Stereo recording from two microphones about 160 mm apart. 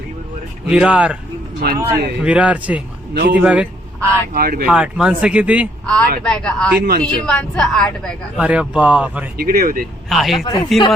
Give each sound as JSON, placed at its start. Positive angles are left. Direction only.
{"t": 0.7, "sound": "speech", "side_deg": -5}
{"t": 1.6, "sound": "a man's voice", "side_deg": -80}
{"t": 2.2, "sound": "speech", "side_deg": -5}
{"t": 3.2, "sound": "a man's voice", "side_deg": -90}
{"t": 3.4, "sound": "speech", "side_deg": -10}
{"t": 4.4, "sound": "speech", "side_deg": -70}
{"t": 4.7, "sound": "speech", "side_deg": -5}
{"t": 5.8, "sound": "a woman's voice", "side_deg": 5}
{"t": 8.4, "sound": "speech", "side_deg": -5}
{"t": 9.4, "sound": "speech", "side_deg": -65}
{"t": 10.1, "sound": "a woman's voice", "side_deg": 0}
{"t": 10.4, "sound": "speech", "side_deg": 30}